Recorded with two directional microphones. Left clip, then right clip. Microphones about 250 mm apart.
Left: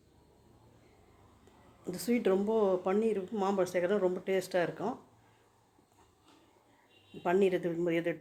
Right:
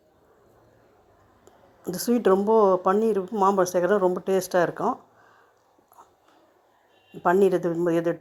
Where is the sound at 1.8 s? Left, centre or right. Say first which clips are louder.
Right 9 dB; right.